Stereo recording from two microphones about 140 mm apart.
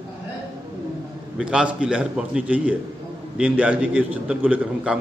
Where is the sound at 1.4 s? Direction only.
5° right (ahead or behind).